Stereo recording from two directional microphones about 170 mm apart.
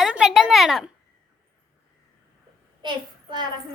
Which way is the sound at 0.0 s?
5° right (ahead or behind).